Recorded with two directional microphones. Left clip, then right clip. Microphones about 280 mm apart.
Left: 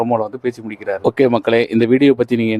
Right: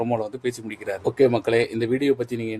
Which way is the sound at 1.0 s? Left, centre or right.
Left.